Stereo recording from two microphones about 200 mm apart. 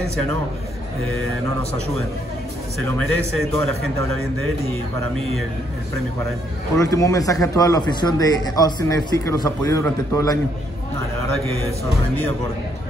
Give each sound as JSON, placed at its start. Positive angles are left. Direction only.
{"t": 3.5, "sound": "speech", "side_deg": 5}
{"t": 6.8, "sound": "a man's voice", "side_deg": 15}